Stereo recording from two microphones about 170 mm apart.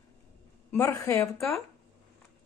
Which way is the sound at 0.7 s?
15° left (ahead or behind).